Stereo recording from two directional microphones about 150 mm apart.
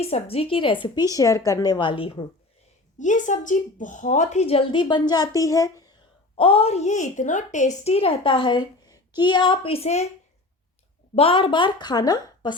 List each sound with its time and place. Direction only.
0.0 s a woman's voice: 40° left (ahead or behind)
3.0 s a woman's voice: 55° left (ahead or behind); by 5.9 s 20° left (ahead or behind)
6.3 s a woman's voice: 40° left (ahead or behind)
11.1 s a woman's voice: 40° left (ahead or behind)